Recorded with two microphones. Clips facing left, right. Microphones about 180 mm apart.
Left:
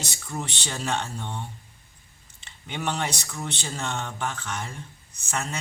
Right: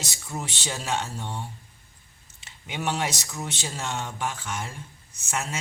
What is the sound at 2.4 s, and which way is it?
Speech, 5° right (ahead or behind).